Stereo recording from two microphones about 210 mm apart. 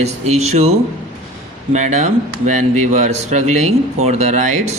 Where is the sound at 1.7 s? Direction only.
35° right (ahead or behind).